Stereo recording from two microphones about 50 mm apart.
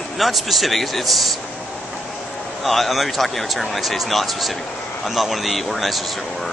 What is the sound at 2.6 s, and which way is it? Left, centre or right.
A man's voice, centre.